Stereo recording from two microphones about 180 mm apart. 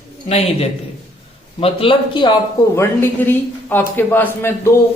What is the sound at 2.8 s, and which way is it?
A man's voice, 10° left (ahead or behind).